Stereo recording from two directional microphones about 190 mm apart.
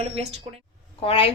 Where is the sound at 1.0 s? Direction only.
30° left (ahead or behind).